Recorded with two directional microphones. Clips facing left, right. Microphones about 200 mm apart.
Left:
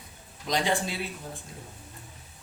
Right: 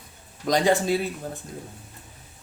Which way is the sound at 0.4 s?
45° right (ahead or behind).